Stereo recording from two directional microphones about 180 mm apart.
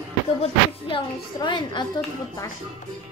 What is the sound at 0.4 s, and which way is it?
A woman's voice, 30° left (ahead or behind).